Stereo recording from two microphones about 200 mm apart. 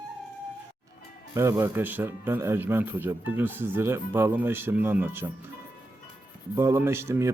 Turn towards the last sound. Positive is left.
turn(degrees=-15)  # may be behind; listen again after turning